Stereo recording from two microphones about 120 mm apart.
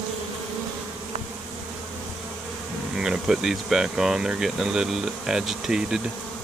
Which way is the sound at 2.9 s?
5° right (ahead or behind).